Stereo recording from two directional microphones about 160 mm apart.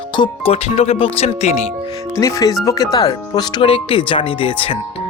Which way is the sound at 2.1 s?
20° left (ahead or behind).